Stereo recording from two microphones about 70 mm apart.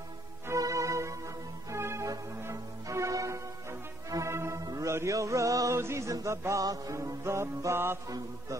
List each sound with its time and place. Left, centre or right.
0.5 s music: right
4.3 s music: right
4.6 s music: right